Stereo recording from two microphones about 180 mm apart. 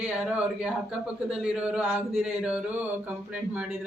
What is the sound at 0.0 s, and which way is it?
Speech, 5° right (ahead or behind).